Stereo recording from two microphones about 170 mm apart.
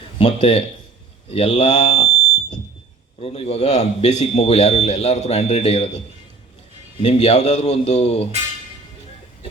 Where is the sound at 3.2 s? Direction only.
35° left (ahead or behind).